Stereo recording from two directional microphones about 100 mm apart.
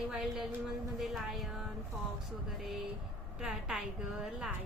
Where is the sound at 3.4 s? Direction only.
5° right (ahead or behind).